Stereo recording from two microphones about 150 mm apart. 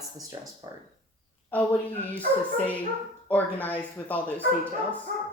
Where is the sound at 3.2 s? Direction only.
10° left (ahead or behind).